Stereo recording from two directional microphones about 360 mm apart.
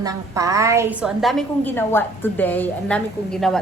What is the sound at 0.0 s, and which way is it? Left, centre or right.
A woman's voice, centre.